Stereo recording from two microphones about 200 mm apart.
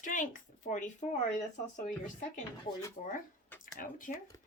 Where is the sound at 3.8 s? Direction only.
40° left (ahead or behind).